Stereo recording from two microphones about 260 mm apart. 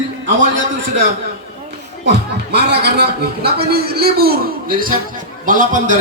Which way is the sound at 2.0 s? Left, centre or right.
Right.